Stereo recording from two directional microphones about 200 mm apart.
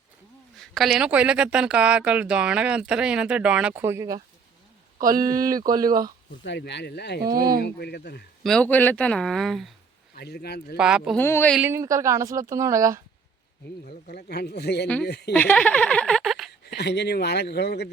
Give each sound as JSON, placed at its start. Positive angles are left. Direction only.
{"t": 0.6, "sound": "speech", "side_deg": 0}
{"t": 4.9, "sound": "speech", "side_deg": -45}
{"t": 5.2, "sound": "a woman's voice", "side_deg": -15}
{"t": 6.4, "sound": "speech", "side_deg": 60}
{"t": 7.3, "sound": "speech", "side_deg": -20}
{"t": 7.6, "sound": "speech", "side_deg": 55}
{"t": 8.4, "sound": "speech", "side_deg": 5}
{"t": 10.2, "sound": "speech", "side_deg": 55}
{"t": 10.8, "sound": "speech", "side_deg": -5}
{"t": 11.2, "sound": "a woman's voice", "side_deg": 10}
{"t": 11.5, "sound": "a woman's voice", "side_deg": -10}
{"t": 13.8, "sound": "speech", "side_deg": 50}
{"t": 15.3, "sound": "speech", "side_deg": 5}
{"t": 16.5, "sound": "speech", "side_deg": 55}